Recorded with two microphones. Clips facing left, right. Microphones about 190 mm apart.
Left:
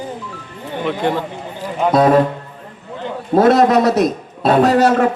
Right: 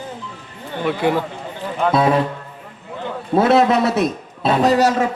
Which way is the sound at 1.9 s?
45° left (ahead or behind).